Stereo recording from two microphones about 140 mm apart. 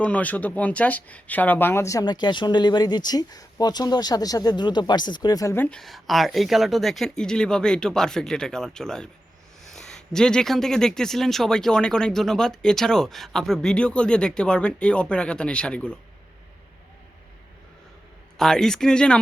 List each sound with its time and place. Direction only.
0.0 s speech: 10° left (ahead or behind)
5.6 s speech: 5° left (ahead or behind)
18.3 s speech: 5° left (ahead or behind)